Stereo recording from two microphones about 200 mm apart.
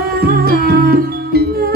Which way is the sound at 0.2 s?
50° right (ahead or behind).